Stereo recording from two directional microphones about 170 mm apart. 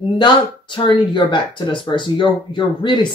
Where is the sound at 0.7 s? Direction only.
30° left (ahead or behind).